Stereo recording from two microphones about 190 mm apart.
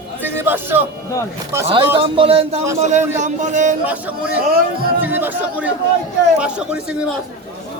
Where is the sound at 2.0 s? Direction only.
30° right (ahead or behind).